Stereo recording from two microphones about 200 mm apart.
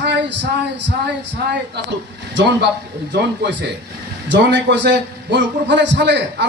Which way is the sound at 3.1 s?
60° right (ahead or behind).